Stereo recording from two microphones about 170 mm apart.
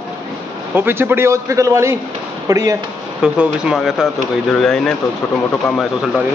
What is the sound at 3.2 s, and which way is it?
Speech, 5° right (ahead or behind).